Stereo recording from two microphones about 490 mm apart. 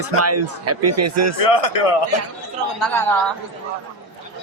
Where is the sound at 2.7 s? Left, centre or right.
Centre.